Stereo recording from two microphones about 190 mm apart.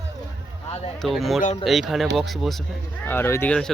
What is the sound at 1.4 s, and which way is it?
Speech, 35° left (ahead or behind).